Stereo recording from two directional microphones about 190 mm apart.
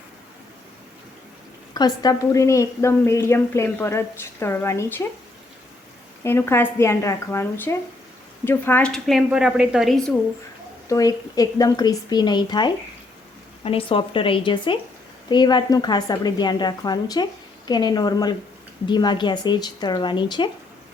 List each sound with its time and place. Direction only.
1.7 s a woman's voice: 20° left (ahead or behind)
6.2 s a woman's voice: 10° left (ahead or behind)
10.8 s a woman's voice: 20° left (ahead or behind)